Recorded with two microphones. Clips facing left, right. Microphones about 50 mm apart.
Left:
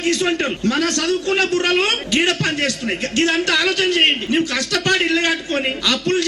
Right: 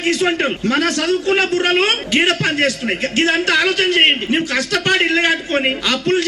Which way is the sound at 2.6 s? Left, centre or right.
Right.